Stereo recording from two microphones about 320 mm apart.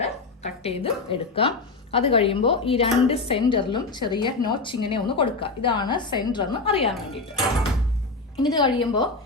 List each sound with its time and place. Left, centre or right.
0.0 s speech: centre
8.4 s speech: centre